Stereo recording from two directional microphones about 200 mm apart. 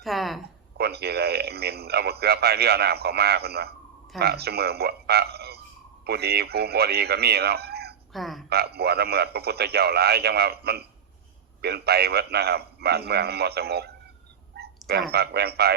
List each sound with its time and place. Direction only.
0.0 s a sound: centre (ahead or behind)
0.8 s speech: 55° right (ahead or behind)
8.1 s speech: centre (ahead or behind)
8.4 s speech: 55° right (ahead or behind)